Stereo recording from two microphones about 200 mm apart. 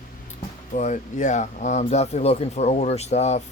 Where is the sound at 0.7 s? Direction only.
40° left (ahead or behind).